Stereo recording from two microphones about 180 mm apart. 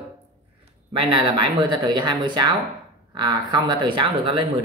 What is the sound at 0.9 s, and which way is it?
Speech, 30° right (ahead or behind).